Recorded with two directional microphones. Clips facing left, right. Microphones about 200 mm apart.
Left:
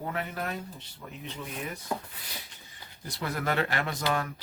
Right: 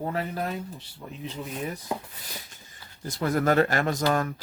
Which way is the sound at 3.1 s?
45° right (ahead or behind).